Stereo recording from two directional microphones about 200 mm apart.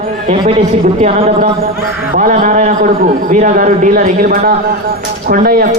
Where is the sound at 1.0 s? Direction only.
30° right (ahead or behind).